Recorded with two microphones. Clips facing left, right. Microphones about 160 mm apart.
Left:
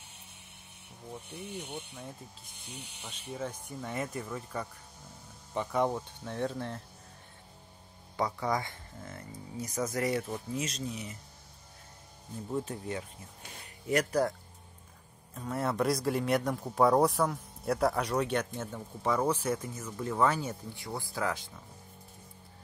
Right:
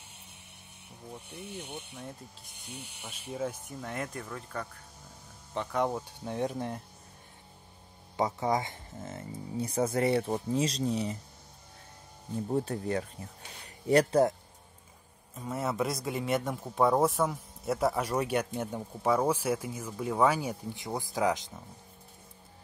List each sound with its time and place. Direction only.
3.0 s speech: 10° right (ahead or behind)
5.9 s speech: 15° right (ahead or behind)
8.2 s speech: 20° right (ahead or behind)
12.4 s speech: 40° right (ahead or behind)
12.7 s speech: 55° right (ahead or behind)
13.8 s speech: 30° right (ahead or behind)
15.3 s speech: 5° right (ahead or behind)